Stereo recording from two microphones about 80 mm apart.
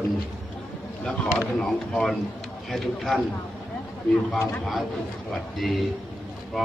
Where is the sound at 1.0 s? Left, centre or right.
Centre.